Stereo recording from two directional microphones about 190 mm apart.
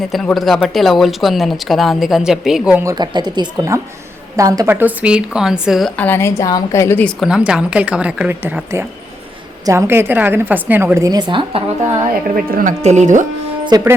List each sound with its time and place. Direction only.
0.1 s speech: centre (ahead or behind)
2.8 s speech: 20° right (ahead or behind); by 5.9 s 5° right (ahead or behind)
6.0 s a woman's voice: 10° left (ahead or behind)
7.2 s a woman's voice: 5° right (ahead or behind); by 12.0 s 20° right (ahead or behind)
12.3 s speech: 45° right (ahead or behind)
13.7 s speech: 20° right (ahead or behind)